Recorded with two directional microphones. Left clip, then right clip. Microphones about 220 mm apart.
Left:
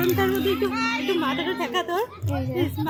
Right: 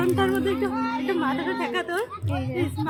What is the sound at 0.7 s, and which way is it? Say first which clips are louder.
Speech: left 2 dB; 25° right (ahead or behind).